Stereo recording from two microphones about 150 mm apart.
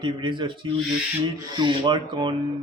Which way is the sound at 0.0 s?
30° right (ahead or behind).